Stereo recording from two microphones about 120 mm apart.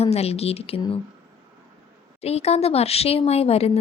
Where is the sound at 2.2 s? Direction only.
60° left (ahead or behind).